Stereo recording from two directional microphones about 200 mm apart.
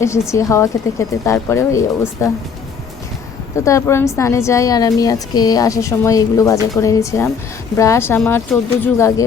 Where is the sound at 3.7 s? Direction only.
15° left (ahead or behind).